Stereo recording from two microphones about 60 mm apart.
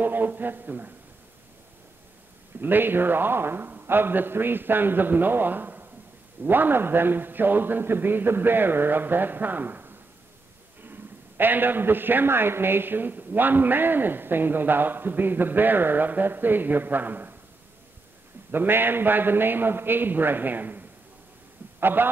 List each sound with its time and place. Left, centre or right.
0.0 s a man's voice: right
2.6 s a man's voice: right
18.5 s a man's voice: right